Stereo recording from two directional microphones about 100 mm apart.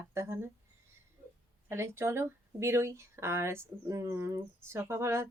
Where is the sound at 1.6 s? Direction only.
25° right (ahead or behind).